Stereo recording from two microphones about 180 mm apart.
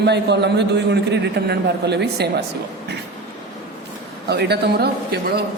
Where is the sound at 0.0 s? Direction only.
70° right (ahead or behind).